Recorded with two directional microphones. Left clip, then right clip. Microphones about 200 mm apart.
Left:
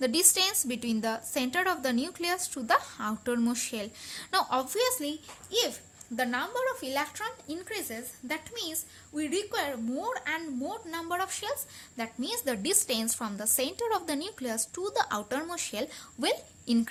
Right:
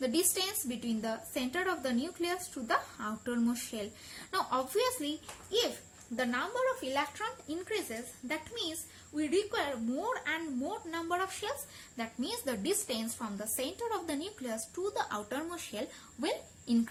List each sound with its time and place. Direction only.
0.0 s a woman's voice: 45° left (ahead or behind)